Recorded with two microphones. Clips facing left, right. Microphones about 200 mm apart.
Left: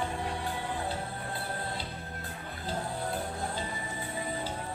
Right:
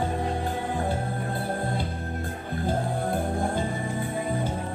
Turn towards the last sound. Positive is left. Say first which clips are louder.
# right 8 dB
turn(degrees=-50)  # may be behind; listen again after turning